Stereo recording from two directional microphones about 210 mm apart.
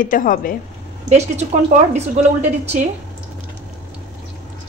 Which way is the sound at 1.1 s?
35° right (ahead or behind).